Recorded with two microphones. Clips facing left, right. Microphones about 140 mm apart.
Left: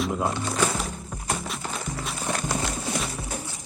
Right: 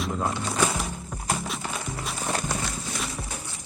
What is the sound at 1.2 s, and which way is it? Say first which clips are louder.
Music: right 1 dB; centre (ahead or behind).